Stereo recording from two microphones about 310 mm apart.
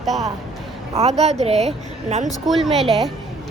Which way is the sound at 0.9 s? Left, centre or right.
Centre.